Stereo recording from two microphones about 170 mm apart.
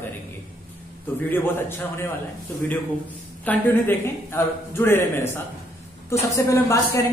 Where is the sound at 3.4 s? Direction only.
10° left (ahead or behind).